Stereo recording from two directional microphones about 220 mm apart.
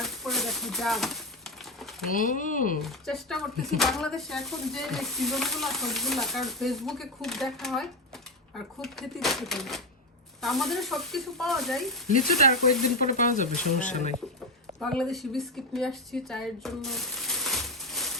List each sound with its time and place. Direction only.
0.0 s a sound: centre (ahead or behind)
2.1 s speech: 35° left (ahead or behind)
2.8 s speech: centre (ahead or behind)
13.0 s speech: 35° left (ahead or behind)
14.8 s speech: centre (ahead or behind)